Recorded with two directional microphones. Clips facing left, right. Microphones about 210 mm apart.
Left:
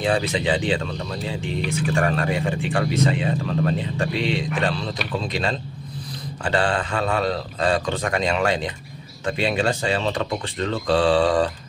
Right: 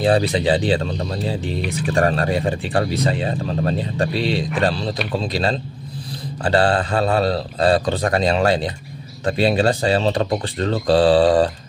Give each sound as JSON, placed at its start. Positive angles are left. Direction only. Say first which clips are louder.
{"t": 0.0, "sound": "speech", "louder": "right 5 dB", "side_deg": -35}